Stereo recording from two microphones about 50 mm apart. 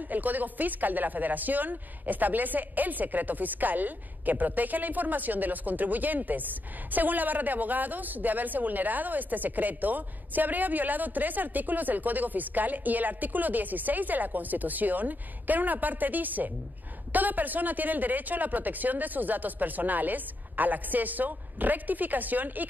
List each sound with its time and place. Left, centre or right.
0.1 s a woman's voice: right